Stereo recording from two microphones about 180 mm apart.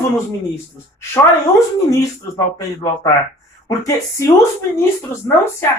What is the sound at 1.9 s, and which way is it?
A woman's voice, 15° left (ahead or behind).